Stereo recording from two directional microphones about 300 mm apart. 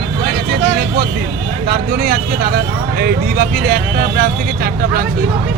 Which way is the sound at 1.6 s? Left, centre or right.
Right.